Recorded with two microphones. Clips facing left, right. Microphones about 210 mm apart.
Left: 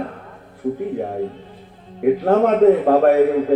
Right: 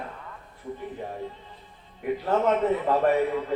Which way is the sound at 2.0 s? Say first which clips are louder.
Left 9 dB; 70° left (ahead or behind).